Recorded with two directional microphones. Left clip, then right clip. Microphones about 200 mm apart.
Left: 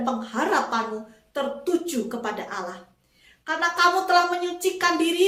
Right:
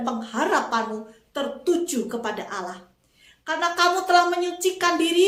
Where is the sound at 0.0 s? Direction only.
15° right (ahead or behind).